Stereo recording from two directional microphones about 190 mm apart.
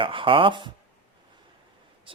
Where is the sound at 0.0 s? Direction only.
25° right (ahead or behind).